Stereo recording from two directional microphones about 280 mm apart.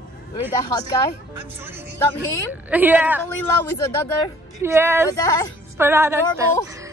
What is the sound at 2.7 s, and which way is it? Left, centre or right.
Speech, centre.